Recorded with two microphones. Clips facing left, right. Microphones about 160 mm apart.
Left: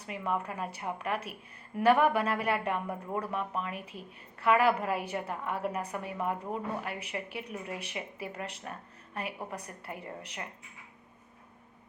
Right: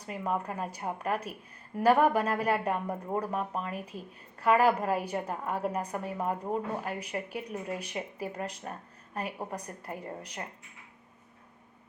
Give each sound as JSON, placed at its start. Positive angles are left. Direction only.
{"t": 0.0, "sound": "a woman's voice", "side_deg": -40}